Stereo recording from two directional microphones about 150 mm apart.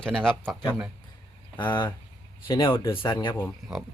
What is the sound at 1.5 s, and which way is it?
Speech, 30° left (ahead or behind).